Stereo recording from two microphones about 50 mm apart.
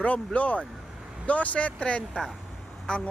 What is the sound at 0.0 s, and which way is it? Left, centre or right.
Speech, left.